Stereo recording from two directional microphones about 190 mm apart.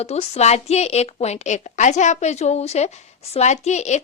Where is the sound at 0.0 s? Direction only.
35° left (ahead or behind).